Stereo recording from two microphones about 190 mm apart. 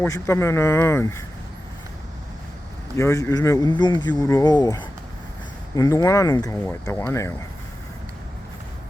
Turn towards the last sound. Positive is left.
turn(degrees=15)  # may be behind; listen again after turning